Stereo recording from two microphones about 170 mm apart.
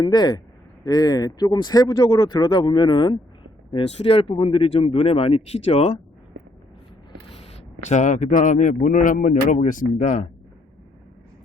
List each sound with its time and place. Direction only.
0.0 s speech: 25° left (ahead or behind)
7.4 s a man's voice: 40° left (ahead or behind)